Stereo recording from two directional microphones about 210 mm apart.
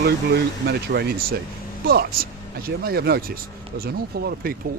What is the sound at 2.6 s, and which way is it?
Speech, 45° right (ahead or behind).